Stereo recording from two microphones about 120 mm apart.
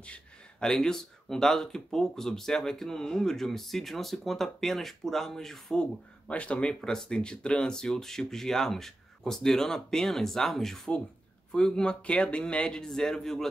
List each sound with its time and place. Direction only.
0.0 s a man's voice: 10° left (ahead or behind)